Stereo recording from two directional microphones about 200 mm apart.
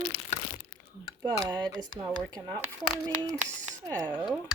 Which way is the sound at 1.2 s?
20° right (ahead or behind).